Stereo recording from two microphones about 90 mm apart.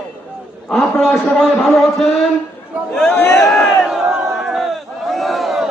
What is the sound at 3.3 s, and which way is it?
Crowd, 5° left (ahead or behind).